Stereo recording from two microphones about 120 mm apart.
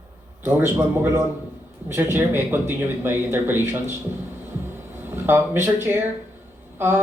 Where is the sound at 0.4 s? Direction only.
20° right (ahead or behind).